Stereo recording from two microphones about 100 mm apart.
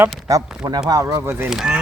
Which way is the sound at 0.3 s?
35° right (ahead or behind).